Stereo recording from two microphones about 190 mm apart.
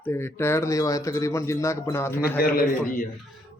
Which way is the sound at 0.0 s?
10° left (ahead or behind).